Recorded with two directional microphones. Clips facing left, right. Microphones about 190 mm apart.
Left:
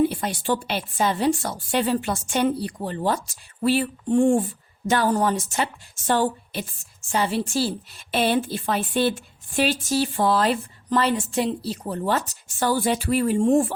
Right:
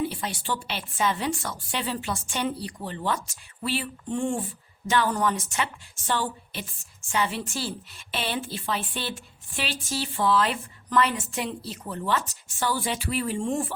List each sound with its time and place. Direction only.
0.0 s a woman's voice: 50° left (ahead or behind)